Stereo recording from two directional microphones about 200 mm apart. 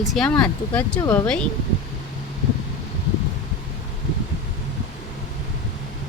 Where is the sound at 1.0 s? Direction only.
15° left (ahead or behind).